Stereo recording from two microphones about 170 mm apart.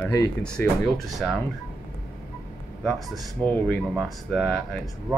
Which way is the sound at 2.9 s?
Centre (ahead or behind).